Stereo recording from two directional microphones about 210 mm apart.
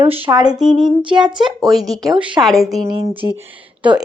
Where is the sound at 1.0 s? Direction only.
25° right (ahead or behind).